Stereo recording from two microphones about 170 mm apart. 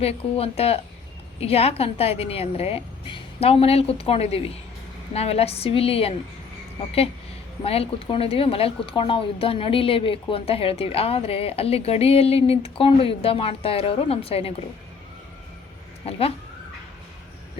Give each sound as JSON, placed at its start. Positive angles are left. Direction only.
{"t": 0.0, "sound": "speech", "side_deg": 35}
{"t": 16.0, "sound": "speech", "side_deg": 35}